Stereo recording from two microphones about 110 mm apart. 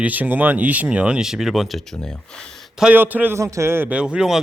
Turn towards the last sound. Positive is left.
turn(degrees=-5)  # may be behind; listen again after turning